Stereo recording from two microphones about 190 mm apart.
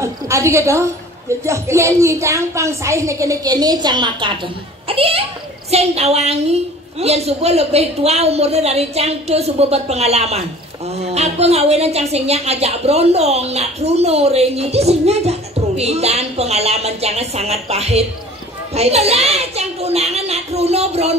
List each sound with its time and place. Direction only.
0.0 s a woman's voice: 15° right (ahead or behind); by 21.2 s 35° right (ahead or behind)